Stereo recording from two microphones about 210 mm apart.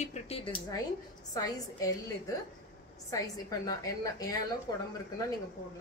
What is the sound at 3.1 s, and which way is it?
A woman's voice, 15° left (ahead or behind).